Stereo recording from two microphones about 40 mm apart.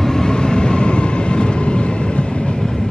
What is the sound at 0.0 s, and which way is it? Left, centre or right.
Vehicle, centre.